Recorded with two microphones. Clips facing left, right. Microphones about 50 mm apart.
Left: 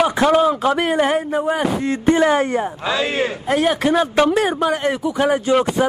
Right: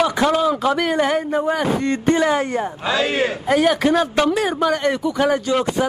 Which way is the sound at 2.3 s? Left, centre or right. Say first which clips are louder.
Left 2 dB; left.